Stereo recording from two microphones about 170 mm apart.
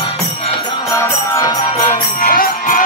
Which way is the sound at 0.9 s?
20° left (ahead or behind).